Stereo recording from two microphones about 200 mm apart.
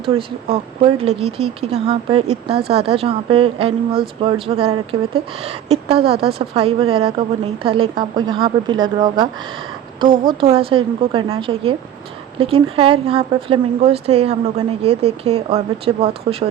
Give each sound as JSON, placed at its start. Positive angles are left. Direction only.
{"t": 0.0, "sound": "a woman's voice", "side_deg": -30}